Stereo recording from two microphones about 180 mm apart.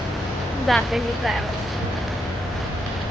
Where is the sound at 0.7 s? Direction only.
Centre (ahead or behind).